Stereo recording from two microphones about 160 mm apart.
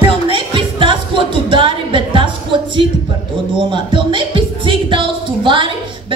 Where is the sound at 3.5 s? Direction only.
30° right (ahead or behind).